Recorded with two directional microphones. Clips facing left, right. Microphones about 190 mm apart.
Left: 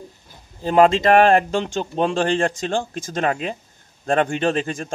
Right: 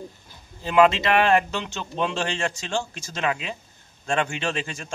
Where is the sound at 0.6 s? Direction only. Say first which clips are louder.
Left 3 dB; 45° left (ahead or behind).